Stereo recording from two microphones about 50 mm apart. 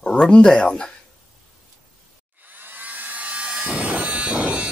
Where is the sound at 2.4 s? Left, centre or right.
Right.